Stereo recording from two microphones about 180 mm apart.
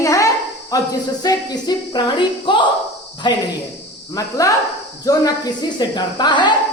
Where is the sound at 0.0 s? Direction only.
20° left (ahead or behind).